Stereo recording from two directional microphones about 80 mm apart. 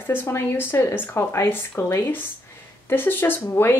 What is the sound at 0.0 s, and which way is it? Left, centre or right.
Speech, left.